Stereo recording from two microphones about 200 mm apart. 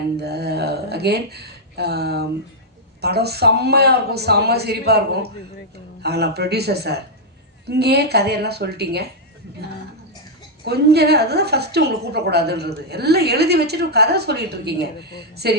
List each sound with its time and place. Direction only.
0.2 s a woman's voice: 55° right (ahead or behind)
10.6 s a woman's voice: 55° right (ahead or behind)